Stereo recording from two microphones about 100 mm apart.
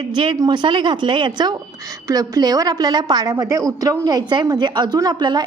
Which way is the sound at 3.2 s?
30° right (ahead or behind).